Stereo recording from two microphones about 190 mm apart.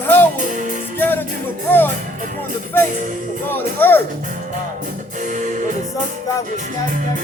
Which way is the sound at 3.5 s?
10° left (ahead or behind).